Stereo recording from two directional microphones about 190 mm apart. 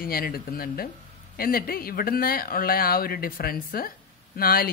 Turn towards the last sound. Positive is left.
turn(degrees=50)  # may be behind; listen again after turning